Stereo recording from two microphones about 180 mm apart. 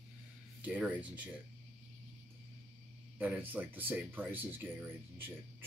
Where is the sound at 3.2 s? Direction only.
10° right (ahead or behind).